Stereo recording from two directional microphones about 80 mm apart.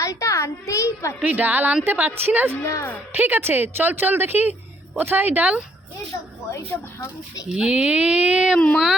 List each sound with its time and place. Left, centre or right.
0.0 s a child's voice: left
1.2 s speech: right
2.6 s a woman's voice: left
3.1 s speech: right
7.5 s speech: centre
8.5 s a sound: centre